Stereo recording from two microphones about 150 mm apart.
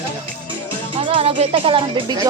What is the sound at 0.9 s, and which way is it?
Speech, 35° right (ahead or behind).